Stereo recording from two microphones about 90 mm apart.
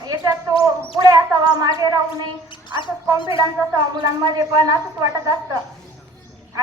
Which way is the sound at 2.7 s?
60° left (ahead or behind).